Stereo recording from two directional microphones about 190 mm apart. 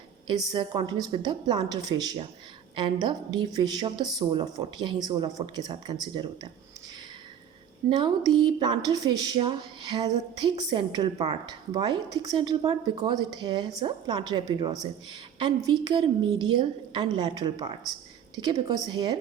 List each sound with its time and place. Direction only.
0.3 s speech: 25° right (ahead or behind)
7.9 s speech: 25° right (ahead or behind)